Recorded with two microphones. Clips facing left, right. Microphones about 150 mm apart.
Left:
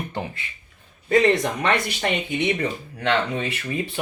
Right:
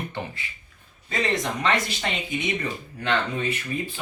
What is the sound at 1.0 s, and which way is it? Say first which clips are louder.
Speech: left 8 dB; 60° left (ahead or behind).